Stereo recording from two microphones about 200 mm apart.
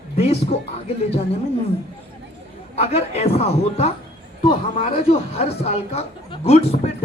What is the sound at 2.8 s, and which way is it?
Speech, 30° left (ahead or behind).